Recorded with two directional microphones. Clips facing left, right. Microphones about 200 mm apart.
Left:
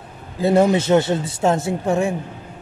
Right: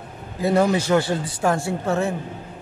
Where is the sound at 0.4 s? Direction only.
25° left (ahead or behind).